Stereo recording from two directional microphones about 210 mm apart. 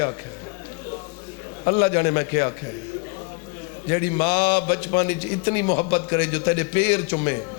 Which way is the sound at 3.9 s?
15° left (ahead or behind).